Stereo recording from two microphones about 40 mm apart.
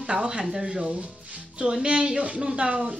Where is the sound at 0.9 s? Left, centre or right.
Right.